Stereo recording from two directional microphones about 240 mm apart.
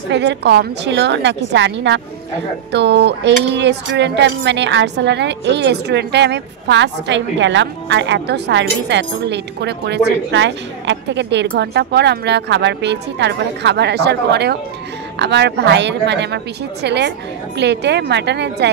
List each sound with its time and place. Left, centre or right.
0.1 s speech: right